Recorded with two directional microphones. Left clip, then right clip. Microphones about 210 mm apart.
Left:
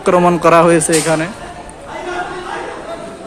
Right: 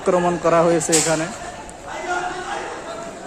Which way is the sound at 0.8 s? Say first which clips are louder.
Left 5 dB; centre (ahead or behind).